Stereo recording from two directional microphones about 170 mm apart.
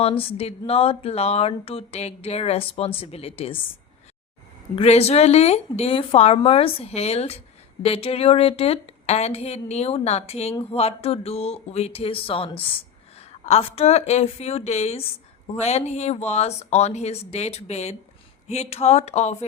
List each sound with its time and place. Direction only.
0.0 s speech: 35° left (ahead or behind)
4.7 s speech: 35° left (ahead or behind)